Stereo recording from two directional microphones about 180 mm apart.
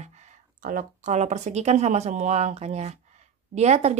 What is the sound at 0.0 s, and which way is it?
Speech, 40° right (ahead or behind).